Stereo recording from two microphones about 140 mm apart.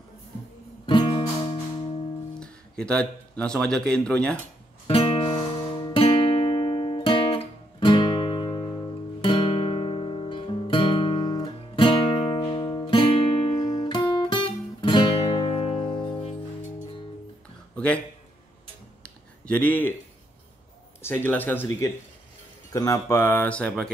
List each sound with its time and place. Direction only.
0.8 s guitar: 35° left (ahead or behind)
2.4 s speech: 5° left (ahead or behind)
4.8 s music: 40° left (ahead or behind)
9.2 s guitar: 35° left (ahead or behind)
17.7 s a sound: 10° left (ahead or behind)
19.0 s a sound: 10° left (ahead or behind)
21.0 s speech: 15° left (ahead or behind)